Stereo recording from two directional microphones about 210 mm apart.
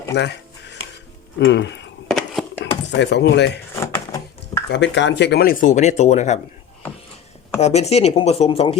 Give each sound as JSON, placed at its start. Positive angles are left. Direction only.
{"t": 0.1, "sound": "music", "side_deg": 50}
{"t": 1.5, "sound": "speech", "side_deg": 55}
{"t": 2.0, "sound": "a sound", "side_deg": 0}
{"t": 2.9, "sound": "speech", "side_deg": 55}
{"t": 3.8, "sound": "a sound", "side_deg": 15}
{"t": 4.7, "sound": "speech", "side_deg": 55}
{"t": 7.6, "sound": "speech", "side_deg": 30}